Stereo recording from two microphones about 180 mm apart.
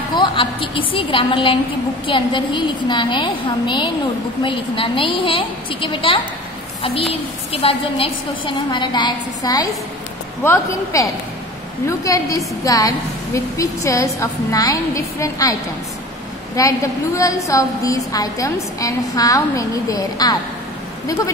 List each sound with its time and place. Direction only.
0.1 s a woman's voice: 25° left (ahead or behind)
7.5 s a woman's voice: 30° left (ahead or behind)
16.5 s a woman's voice: 20° left (ahead or behind)